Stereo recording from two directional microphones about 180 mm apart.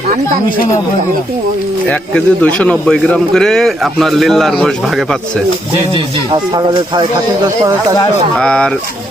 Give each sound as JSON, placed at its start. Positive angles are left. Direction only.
{"t": 1.9, "sound": "speech", "side_deg": 5}
{"t": 5.9, "sound": "speech", "side_deg": -25}
{"t": 8.4, "sound": "speech", "side_deg": 5}